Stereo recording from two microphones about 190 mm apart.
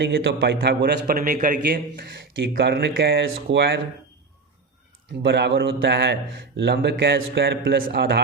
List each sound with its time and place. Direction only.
0.1 s a man's voice: 60° right (ahead or behind)
2.3 s speech: 70° right (ahead or behind)
5.2 s speech: 60° right (ahead or behind)